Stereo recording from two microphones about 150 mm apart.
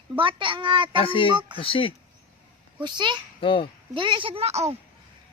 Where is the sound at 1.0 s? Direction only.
35° left (ahead or behind).